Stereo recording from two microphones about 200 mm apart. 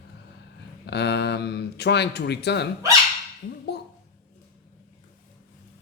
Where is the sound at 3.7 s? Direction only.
55° left (ahead or behind).